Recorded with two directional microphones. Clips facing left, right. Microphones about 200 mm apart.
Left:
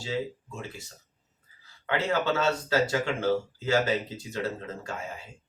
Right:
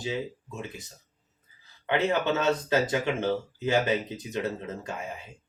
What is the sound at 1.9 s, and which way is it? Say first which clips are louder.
Speech: right 2 dB; 20° right (ahead or behind).